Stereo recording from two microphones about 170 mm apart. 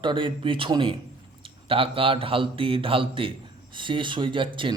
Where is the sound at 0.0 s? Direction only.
30° right (ahead or behind).